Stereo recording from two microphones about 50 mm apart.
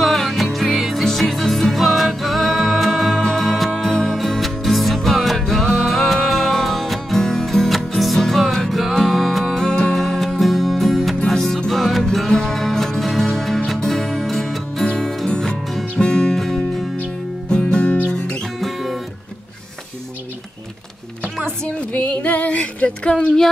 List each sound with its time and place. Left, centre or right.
0.0 s music: centre
17.5 s music: centre
18.6 s music: centre
21.5 s a sound: left
21.9 s female singing: left; by 23.5 s centre